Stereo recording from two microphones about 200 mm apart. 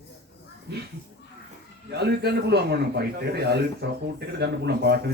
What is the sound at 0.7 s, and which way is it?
Speech, 55° right (ahead or behind).